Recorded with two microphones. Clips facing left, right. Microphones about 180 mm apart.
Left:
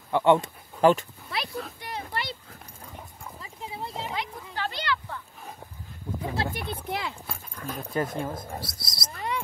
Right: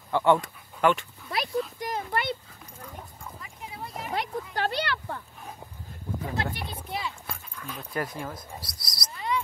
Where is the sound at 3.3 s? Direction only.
25° left (ahead or behind).